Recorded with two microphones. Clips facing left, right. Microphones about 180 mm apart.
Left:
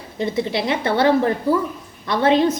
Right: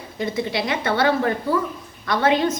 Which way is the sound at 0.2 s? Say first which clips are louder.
Left 2 dB; 30° left (ahead or behind).